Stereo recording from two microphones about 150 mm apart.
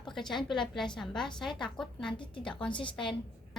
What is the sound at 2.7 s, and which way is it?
Speech, 35° left (ahead or behind).